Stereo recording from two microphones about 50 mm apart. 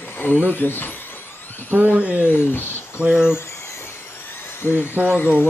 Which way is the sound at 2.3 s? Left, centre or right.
Left.